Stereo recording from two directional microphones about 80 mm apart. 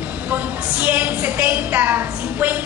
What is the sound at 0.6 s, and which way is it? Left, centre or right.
A woman's voice, centre.